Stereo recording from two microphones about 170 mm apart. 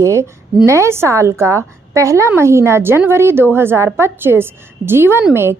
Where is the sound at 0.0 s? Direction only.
15° right (ahead or behind).